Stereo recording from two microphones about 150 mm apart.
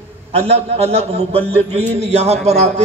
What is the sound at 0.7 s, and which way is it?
A man's voice, 40° right (ahead or behind).